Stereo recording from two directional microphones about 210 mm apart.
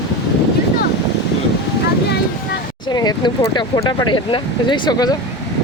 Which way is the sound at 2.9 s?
20° left (ahead or behind).